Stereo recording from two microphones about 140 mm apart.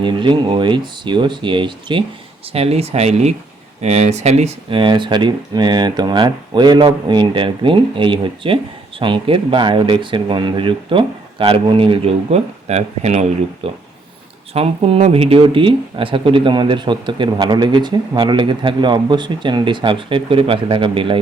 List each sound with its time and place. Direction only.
0.0 s speech: 35° right (ahead or behind)
2.5 s speech: 45° right (ahead or behind)
4.7 s speech: 35° right (ahead or behind)